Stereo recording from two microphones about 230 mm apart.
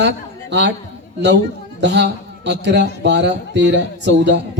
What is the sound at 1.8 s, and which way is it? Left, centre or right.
A man's voice, right.